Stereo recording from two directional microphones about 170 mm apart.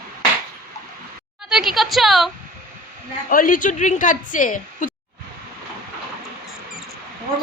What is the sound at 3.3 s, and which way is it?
A woman's voice, 55° left (ahead or behind).